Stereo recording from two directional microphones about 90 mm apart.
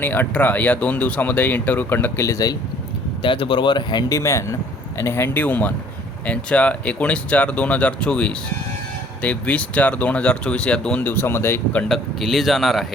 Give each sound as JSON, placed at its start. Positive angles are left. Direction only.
{"t": 0.0, "sound": "speech", "side_deg": 20}
{"t": 2.2, "sound": "speech", "side_deg": 40}
{"t": 3.2, "sound": "speech", "side_deg": 70}
{"t": 4.1, "sound": "speech", "side_deg": 35}
{"t": 11.9, "sound": "speech", "side_deg": 0}